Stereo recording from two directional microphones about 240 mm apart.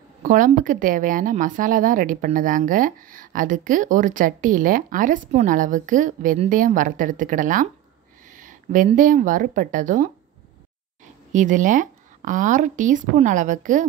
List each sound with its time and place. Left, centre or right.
0.2 s speech: right
11.3 s speech: right